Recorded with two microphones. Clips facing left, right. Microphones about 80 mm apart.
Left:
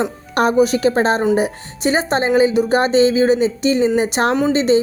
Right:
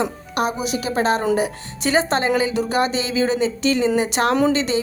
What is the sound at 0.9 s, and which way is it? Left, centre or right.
A woman's voice, left.